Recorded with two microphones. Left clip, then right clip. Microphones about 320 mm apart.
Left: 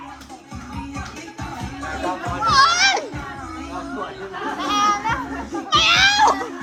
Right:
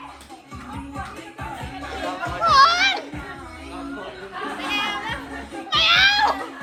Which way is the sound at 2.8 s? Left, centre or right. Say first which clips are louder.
Left 3 dB; centre.